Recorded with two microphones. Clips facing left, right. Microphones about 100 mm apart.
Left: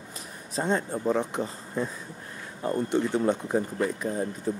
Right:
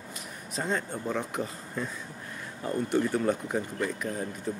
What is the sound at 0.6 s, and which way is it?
Speech, 30° left (ahead or behind).